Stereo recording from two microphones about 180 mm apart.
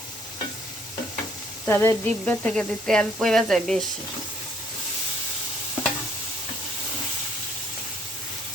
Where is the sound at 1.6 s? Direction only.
15° left (ahead or behind).